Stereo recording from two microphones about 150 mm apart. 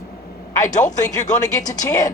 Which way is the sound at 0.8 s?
25° left (ahead or behind).